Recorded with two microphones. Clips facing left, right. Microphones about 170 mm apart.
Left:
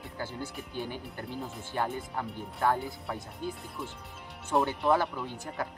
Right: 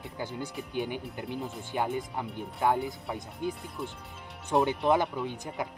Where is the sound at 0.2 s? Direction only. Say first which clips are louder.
Right 2 dB; 15° right (ahead or behind).